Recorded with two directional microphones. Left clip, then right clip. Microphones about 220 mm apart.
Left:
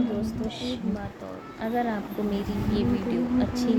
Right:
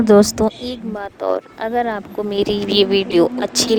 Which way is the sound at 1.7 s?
45° right (ahead or behind).